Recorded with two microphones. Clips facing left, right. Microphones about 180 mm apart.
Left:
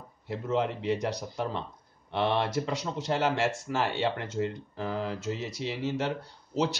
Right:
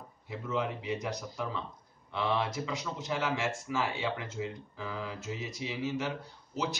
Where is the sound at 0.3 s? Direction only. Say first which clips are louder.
Left 5 dB; 65° left (ahead or behind).